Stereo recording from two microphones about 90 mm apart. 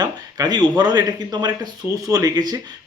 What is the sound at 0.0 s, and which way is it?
Speech, 50° right (ahead or behind).